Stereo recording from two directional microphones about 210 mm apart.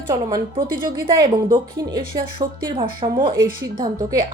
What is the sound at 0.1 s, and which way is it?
Speech, 20° right (ahead or behind).